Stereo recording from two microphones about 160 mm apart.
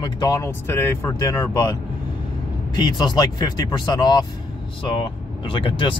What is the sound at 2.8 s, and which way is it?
Speech, 25° left (ahead or behind).